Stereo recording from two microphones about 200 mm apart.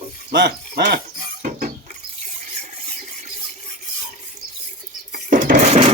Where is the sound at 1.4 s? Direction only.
40° right (ahead or behind).